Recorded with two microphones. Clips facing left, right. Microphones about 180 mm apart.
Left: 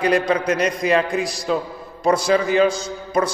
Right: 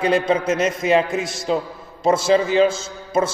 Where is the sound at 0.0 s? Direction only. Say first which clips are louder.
Even; 25° right (ahead or behind).